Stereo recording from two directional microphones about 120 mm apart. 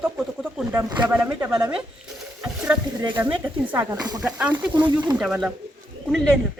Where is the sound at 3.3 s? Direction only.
10° right (ahead or behind).